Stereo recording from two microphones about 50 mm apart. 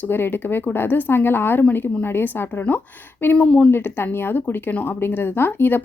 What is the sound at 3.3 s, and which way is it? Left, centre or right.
Speech, centre.